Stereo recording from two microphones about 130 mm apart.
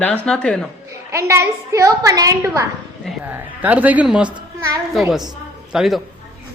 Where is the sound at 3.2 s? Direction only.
15° right (ahead or behind).